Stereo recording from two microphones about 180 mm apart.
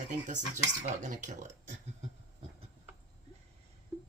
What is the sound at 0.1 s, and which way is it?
Speech, 45° right (ahead or behind).